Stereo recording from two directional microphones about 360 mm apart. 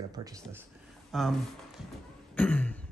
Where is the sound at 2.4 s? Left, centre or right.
Centre.